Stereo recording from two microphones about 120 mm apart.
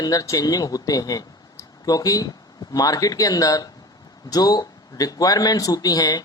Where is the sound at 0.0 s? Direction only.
30° left (ahead or behind).